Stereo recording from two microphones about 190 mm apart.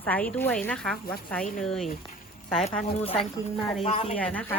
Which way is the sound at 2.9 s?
30° left (ahead or behind).